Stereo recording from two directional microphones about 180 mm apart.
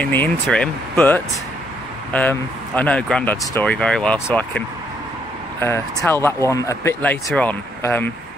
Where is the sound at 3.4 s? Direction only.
20° left (ahead or behind).